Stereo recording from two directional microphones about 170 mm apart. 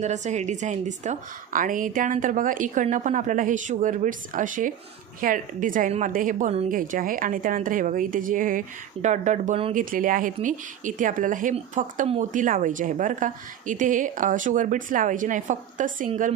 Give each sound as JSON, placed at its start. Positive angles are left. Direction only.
{"t": 0.0, "sound": "a woman's voice", "side_deg": -45}
{"t": 9.7, "sound": "a woman's voice", "side_deg": -55}